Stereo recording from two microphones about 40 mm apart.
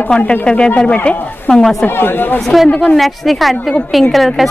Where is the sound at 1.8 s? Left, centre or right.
Left.